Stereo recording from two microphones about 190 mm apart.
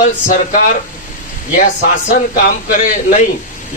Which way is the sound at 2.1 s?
45° left (ahead or behind).